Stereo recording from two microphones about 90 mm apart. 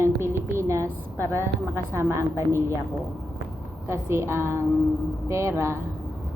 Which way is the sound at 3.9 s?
30° right (ahead or behind).